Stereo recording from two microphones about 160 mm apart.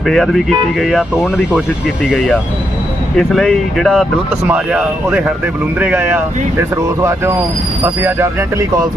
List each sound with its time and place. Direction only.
0.1 s speech: centre (ahead or behind); by 8.9 s 20° right (ahead or behind)